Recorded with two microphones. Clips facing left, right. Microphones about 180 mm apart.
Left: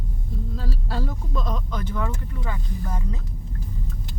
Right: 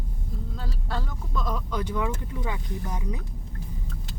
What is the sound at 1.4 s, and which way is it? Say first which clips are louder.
Speech: even; 10° right (ahead or behind).